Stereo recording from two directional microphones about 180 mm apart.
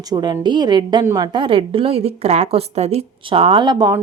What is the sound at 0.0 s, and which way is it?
A woman's voice, 20° right (ahead or behind).